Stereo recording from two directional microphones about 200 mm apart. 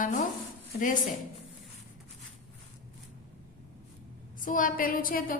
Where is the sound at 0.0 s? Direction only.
40° left (ahead or behind).